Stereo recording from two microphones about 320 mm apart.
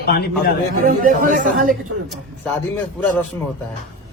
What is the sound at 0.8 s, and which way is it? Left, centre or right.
Speech, right.